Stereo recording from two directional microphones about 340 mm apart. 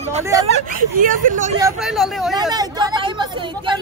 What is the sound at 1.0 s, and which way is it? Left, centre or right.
Speech, right.